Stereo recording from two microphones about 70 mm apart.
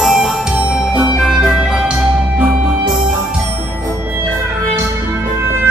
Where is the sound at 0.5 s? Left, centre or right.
Centre.